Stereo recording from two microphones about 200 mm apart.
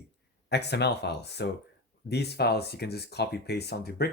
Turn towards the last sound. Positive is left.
turn(degrees=55)  # may be behind; listen again after turning